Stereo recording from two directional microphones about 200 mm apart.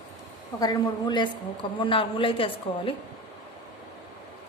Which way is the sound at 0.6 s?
20° left (ahead or behind).